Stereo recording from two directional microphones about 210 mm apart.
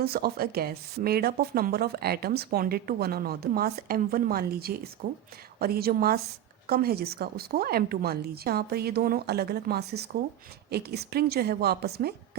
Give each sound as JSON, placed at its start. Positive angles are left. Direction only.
{"t": 0.0, "sound": "speech", "side_deg": -45}